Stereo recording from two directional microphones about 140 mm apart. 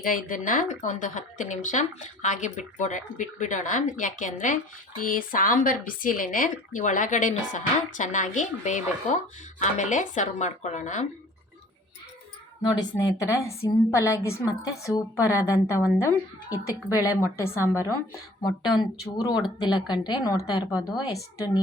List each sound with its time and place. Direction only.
0.0 s speech: 75° left (ahead or behind)
5.0 s speech: 80° left; by 11.0 s 60° left (ahead or behind)
13.0 s a woman's voice: 25° left (ahead or behind)
18.7 s a woman's voice: 30° left (ahead or behind)